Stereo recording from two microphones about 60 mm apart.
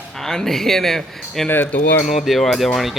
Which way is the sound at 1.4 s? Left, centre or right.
Left.